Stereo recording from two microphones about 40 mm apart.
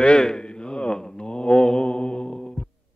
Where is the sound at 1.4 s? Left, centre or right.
Centre.